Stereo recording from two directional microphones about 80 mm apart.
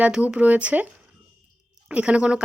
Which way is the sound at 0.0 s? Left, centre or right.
Centre.